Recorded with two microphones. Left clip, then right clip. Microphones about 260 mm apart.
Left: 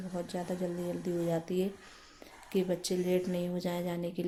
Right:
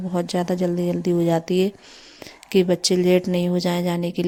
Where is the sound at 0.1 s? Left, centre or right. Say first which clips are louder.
Right 14 dB; right.